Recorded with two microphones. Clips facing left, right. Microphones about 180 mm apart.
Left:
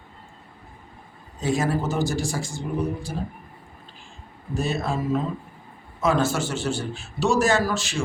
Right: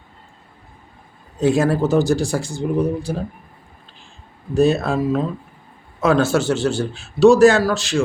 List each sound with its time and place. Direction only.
1.4 s speech: 65° right (ahead or behind)
4.5 s a man's voice: 65° right (ahead or behind)